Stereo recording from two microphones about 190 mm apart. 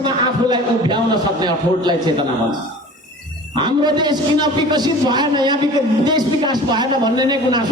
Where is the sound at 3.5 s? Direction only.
25° right (ahead or behind).